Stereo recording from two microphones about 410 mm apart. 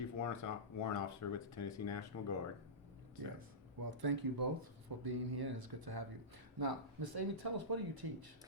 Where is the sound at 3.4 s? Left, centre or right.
Right.